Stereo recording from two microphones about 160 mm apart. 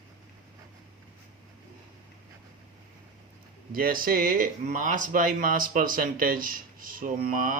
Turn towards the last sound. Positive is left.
turn(degrees=-60)  # may be behind; listen again after turning